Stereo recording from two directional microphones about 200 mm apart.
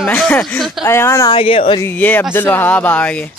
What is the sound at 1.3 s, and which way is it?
Speech, 30° left (ahead or behind).